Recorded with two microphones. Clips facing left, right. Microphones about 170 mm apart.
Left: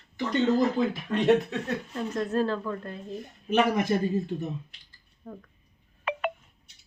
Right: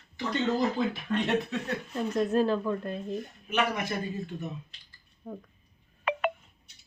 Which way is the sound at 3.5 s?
40° left (ahead or behind).